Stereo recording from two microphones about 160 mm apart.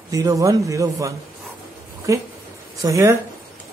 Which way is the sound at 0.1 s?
20° right (ahead or behind).